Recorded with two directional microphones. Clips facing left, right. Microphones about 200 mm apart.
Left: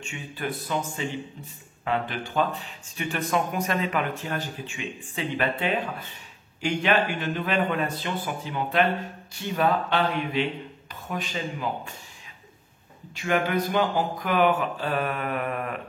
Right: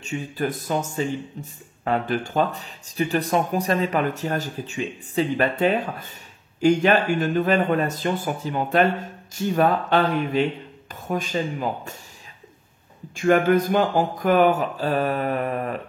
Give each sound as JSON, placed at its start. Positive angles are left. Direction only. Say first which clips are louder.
{"t": 0.0, "sound": "speech", "louder": "right 7 dB", "side_deg": -40}
{"t": 13.1, "sound": "speech", "louder": "right 7 dB", "side_deg": -45}